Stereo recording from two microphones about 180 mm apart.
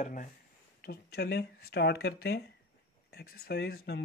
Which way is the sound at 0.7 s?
65° left (ahead or behind).